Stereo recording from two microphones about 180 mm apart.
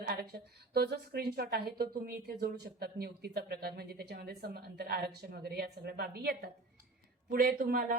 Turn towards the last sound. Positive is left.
turn(degrees=-50)  # may be behind; listen again after turning